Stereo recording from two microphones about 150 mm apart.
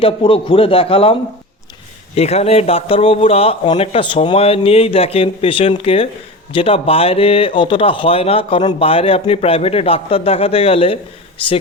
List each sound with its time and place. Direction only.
0.0 s speech: 35° left (ahead or behind)
2.1 s speech: 45° left (ahead or behind)